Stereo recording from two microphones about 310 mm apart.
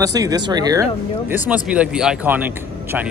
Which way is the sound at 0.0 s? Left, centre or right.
Centre.